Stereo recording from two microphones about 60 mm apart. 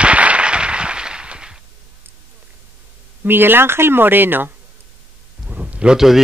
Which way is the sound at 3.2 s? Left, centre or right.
Right.